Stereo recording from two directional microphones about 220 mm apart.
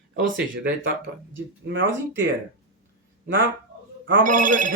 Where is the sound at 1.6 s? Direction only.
55° right (ahead or behind).